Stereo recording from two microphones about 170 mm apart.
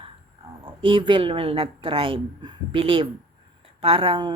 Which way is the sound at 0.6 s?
30° right (ahead or behind).